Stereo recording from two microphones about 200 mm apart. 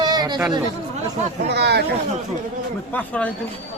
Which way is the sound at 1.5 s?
55° right (ahead or behind).